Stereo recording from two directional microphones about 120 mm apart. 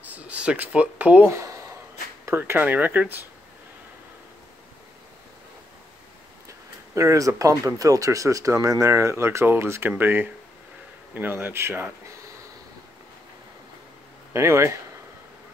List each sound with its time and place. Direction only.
0.0 s speech: 10° right (ahead or behind)
1.3 s speech: 25° right (ahead or behind)
7.0 s speech: 25° right (ahead or behind)
14.3 s speech: 20° right (ahead or behind)